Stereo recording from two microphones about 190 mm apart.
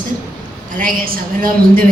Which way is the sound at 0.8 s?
50° right (ahead or behind).